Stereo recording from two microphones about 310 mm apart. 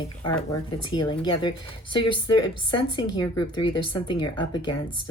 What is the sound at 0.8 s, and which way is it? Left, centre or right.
A woman's voice, centre.